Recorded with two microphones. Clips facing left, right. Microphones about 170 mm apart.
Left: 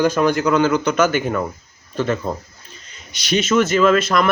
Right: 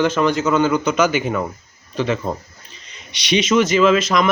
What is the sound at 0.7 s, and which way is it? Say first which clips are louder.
Speech: even; 10° right (ahead or behind).